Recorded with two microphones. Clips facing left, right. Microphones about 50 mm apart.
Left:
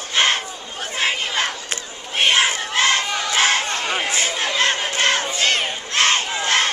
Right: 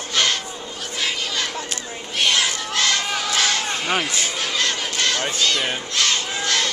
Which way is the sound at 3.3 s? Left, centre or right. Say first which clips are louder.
Left 5 dB; left.